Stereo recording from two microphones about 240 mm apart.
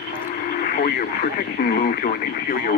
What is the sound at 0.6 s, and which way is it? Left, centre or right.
Radio, left.